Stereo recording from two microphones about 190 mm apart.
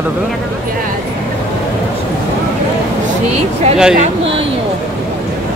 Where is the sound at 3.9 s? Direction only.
30° right (ahead or behind).